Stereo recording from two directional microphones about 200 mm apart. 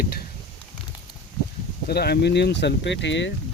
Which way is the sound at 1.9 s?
55° left (ahead or behind).